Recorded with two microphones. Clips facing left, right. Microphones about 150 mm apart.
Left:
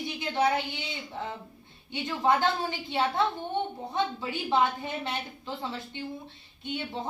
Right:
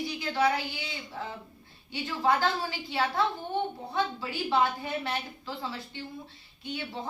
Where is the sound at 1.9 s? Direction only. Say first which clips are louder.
Left 1 dB; 20° left (ahead or behind).